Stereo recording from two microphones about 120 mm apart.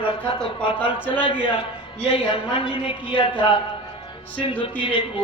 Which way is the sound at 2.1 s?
45° left (ahead or behind).